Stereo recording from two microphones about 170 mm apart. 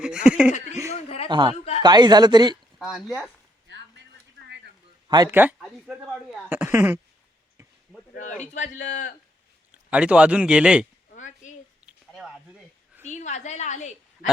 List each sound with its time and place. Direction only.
0.0 s speech: 5° right (ahead or behind)
0.5 s speech: 40° left (ahead or behind)
1.3 s speech: 25° right (ahead or behind)
1.5 s a sound: 40° left (ahead or behind)
1.8 s speech: 25° right (ahead or behind)
2.7 s speech: 5° right (ahead or behind)
3.7 s a sound: 90° right
5.0 s a man's voice: 25° right (ahead or behind)
5.3 s speech: 10° right (ahead or behind)
8.4 s a man's voice: 45° left (ahead or behind)
9.9 s speech: 5° right (ahead or behind)
11.1 s chop: 45° left (ahead or behind)
12.1 s a sound: centre (ahead or behind)
13.1 s a woman's voice: 45° left (ahead or behind)